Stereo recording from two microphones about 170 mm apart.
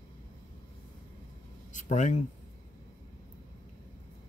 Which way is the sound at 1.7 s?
45° left (ahead or behind).